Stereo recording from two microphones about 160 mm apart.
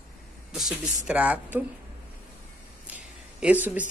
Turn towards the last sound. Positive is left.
turn(degrees=-10)  # may be behind; listen again after turning